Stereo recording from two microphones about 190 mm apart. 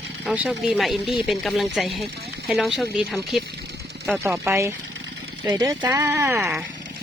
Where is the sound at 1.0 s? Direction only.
25° left (ahead or behind).